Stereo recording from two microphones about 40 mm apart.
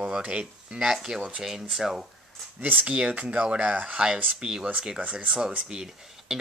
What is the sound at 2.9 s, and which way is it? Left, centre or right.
Speech, right.